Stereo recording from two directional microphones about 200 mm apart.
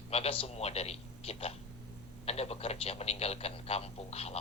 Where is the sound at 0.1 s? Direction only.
30° left (ahead or behind).